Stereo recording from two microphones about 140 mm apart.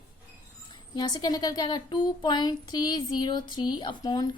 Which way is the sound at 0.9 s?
30° left (ahead or behind).